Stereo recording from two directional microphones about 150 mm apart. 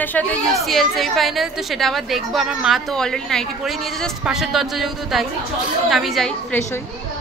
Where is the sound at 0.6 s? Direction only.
Centre (ahead or behind).